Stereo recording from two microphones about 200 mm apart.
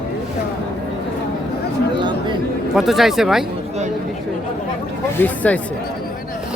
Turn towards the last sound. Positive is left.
turn(degrees=10)  # may be behind; listen again after turning